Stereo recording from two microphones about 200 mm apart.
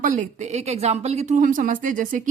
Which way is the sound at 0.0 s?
40° right (ahead or behind).